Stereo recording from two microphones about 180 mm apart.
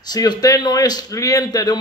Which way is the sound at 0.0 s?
20° left (ahead or behind).